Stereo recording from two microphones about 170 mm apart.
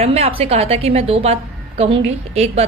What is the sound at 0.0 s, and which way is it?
A woman's voice, 35° right (ahead or behind).